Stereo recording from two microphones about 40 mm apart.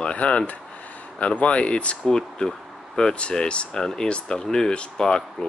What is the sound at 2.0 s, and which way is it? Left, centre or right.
Speech, centre.